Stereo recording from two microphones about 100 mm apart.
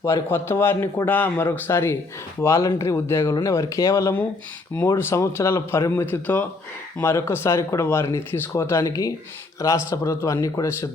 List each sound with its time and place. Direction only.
0.3 s speech: 20° left (ahead or behind)
8.8 s speech: 35° left (ahead or behind)